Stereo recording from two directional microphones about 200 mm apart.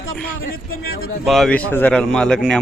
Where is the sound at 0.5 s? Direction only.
50° left (ahead or behind).